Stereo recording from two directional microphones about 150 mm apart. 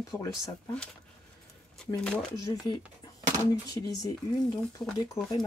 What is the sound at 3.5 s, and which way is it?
Speech, 25° left (ahead or behind).